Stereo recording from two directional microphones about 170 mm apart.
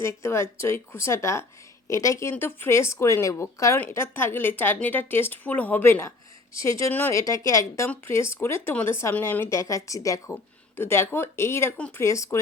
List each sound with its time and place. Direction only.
0.0 s speech: 15° left (ahead or behind)